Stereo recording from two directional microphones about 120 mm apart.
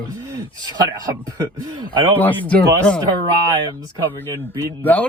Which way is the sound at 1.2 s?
35° right (ahead or behind).